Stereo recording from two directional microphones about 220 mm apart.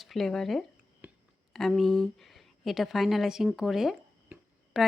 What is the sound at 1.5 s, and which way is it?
A woman's voice, centre (ahead or behind).